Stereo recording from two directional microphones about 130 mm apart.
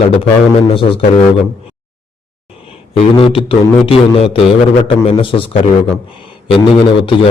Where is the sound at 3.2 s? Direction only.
45° left (ahead or behind).